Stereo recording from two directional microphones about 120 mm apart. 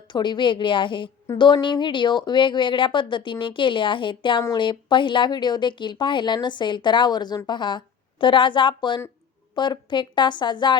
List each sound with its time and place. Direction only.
0.1 s a woman's voice: 40° left (ahead or behind)